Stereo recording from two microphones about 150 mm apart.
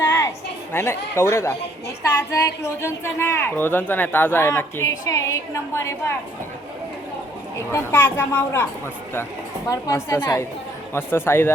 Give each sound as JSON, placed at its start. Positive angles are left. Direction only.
{"t": 0.7, "sound": "speech", "side_deg": 15}
{"t": 7.7, "sound": "speech", "side_deg": 15}
{"t": 9.6, "sound": "a woman's voice", "side_deg": 25}